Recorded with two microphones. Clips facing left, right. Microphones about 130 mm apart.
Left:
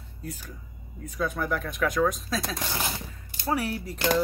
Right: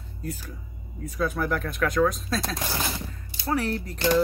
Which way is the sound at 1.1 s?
Centre (ahead or behind).